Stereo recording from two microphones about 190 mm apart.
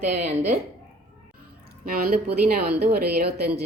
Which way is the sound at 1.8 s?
50° right (ahead or behind).